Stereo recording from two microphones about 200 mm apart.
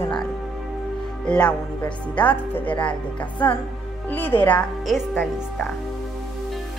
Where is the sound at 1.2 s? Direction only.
5° left (ahead or behind).